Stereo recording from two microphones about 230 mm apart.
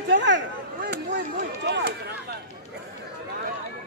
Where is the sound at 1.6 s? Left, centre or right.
Right.